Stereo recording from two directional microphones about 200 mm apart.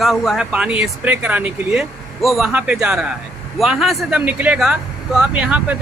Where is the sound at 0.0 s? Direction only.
Centre (ahead or behind).